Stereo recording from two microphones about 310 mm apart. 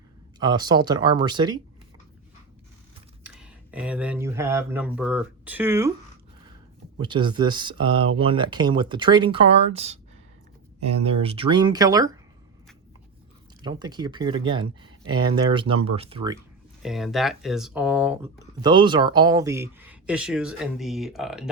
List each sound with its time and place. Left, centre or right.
0.3 s speech: centre
3.2 s speech: centre
7.0 s speech: centre
11.0 s speech: centre
13.6 s speech: centre
16.8 s speech: centre